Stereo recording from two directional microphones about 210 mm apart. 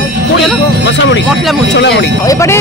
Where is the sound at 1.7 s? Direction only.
55° left (ahead or behind).